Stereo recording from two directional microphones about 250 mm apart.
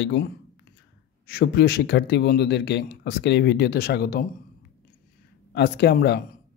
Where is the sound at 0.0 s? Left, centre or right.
Left.